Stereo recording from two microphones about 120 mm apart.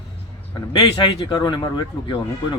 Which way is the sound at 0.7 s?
40° left (ahead or behind).